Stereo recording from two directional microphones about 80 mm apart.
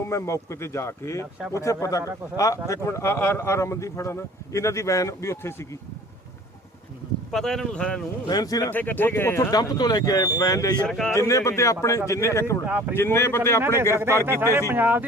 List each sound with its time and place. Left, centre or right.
0.1 s speech: left
7.3 s speech: centre
8.3 s speech: left
8.7 s speech: left
9.5 s speech: left
10.8 s speech: centre
11.1 s speech: left
12.6 s speech: right
12.9 s speech: left
14.3 s speech: right